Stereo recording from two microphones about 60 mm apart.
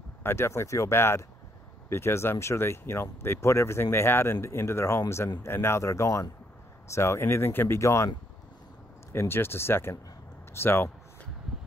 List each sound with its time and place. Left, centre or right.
0.2 s speech: left
9.1 s speech: left